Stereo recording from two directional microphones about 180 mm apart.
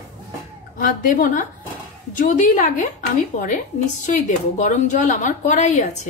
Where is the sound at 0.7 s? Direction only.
50° left (ahead or behind).